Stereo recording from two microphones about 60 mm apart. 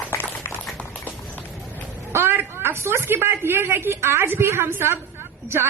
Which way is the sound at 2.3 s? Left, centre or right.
Right.